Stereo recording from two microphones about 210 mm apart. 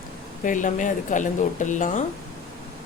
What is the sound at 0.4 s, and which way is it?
A woman's voice, 35° left (ahead or behind).